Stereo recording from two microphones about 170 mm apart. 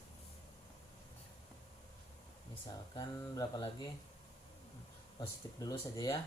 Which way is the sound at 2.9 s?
20° left (ahead or behind).